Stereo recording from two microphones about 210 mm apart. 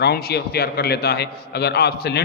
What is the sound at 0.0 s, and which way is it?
A man's voice, 50° left (ahead or behind).